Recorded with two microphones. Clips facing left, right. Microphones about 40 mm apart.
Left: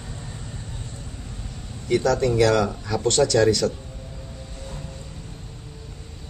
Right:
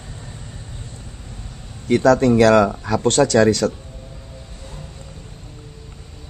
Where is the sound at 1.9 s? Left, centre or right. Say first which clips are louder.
Right 6 dB; right.